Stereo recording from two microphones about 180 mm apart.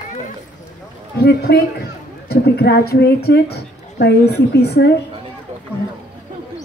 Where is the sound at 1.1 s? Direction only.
65° left (ahead or behind).